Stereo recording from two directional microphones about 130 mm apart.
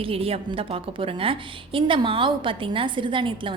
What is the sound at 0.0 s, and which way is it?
A woman's voice, 45° right (ahead or behind).